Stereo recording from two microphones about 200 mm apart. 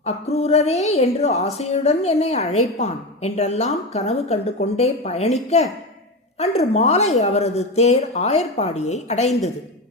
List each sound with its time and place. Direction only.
0.0 s speech: 30° left (ahead or behind)